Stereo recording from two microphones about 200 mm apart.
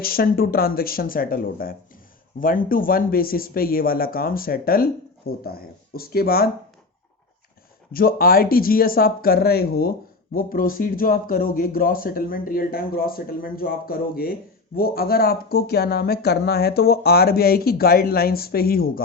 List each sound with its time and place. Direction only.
0.0 s speech: 50° left (ahead or behind)
7.9 s speech: 45° left (ahead or behind)